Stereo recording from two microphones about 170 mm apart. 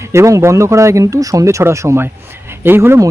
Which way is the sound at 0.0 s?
15° right (ahead or behind).